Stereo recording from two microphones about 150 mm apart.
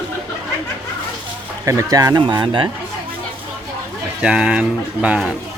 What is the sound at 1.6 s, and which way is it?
Speech, 20° right (ahead or behind).